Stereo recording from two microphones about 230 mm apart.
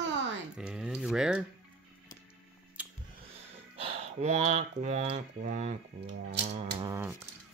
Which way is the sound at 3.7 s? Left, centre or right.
Right.